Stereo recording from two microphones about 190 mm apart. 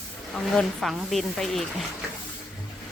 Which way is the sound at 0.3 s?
Centre (ahead or behind).